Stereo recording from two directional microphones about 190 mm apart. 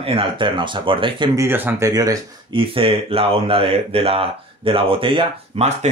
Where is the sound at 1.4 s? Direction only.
10° right (ahead or behind); by 5.7 s 30° right (ahead or behind).